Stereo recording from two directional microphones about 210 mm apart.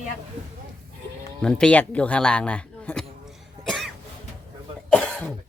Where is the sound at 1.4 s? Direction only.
5° left (ahead or behind).